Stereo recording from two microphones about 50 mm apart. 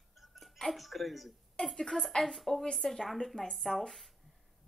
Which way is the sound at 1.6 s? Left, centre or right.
Centre.